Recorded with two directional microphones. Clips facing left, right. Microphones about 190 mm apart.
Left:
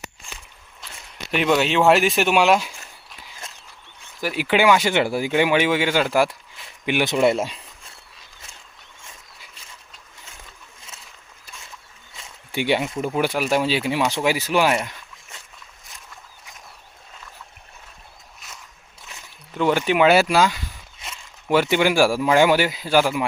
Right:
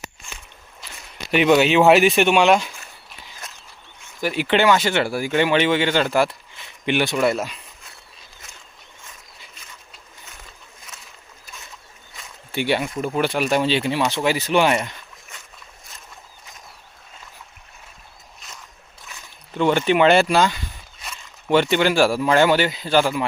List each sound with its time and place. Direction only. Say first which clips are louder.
1.3 s speech: right 4 dB; centre (ahead or behind)
4.2 s speech: right 1 dB; 5° left (ahead or behind)
7.1 s speech: left 2 dB; 20° left (ahead or behind)
12.5 s speech: even; 15° left (ahead or behind)
13.1 s speech: right 1 dB; 10° left (ahead or behind)
18.4 s boat: even; 5° left (ahead or behind)
19.5 s speech: right 1 dB; 5° left (ahead or behind)